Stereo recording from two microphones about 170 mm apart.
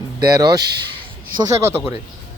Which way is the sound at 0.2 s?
25° right (ahead or behind).